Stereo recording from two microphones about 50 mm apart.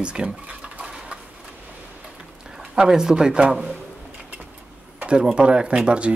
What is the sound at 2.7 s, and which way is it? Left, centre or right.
Speech, centre.